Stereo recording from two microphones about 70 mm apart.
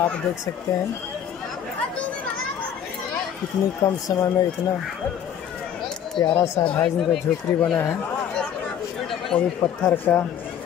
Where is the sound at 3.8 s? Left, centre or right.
Left.